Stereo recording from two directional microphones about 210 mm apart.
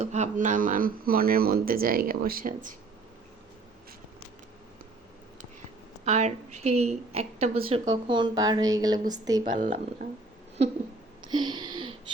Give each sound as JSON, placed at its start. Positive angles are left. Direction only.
{"t": 0.0, "sound": "speech", "side_deg": -35}
{"t": 6.1, "sound": "a woman's voice", "side_deg": -35}
{"t": 9.4, "sound": "a woman's voice", "side_deg": -40}
{"t": 11.2, "sound": "a sound", "side_deg": -20}